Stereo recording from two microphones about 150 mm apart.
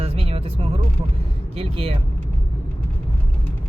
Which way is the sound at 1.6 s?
40° right (ahead or behind).